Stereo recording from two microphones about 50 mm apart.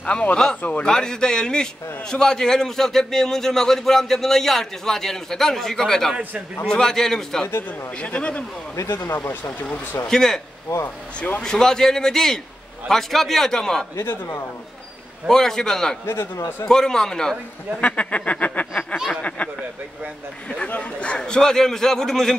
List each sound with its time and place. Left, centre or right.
0.0 s speech: left
0.8 s a man's voice: centre
7.4 s a man's voice: left
8.0 s speech: left
8.8 s a man's voice: left
9.3 s speech: left
10.0 s a man's voice: centre
10.7 s a man's voice: left
11.4 s a man's voice: centre
15.2 s a man's voice: centre
16.1 s a man's voice: left
16.6 s a man's voice: centre
17.7 s a man's voice: left; by 22.3 s centre